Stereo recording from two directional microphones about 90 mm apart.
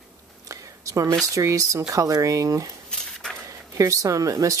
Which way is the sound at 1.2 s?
35° right (ahead or behind).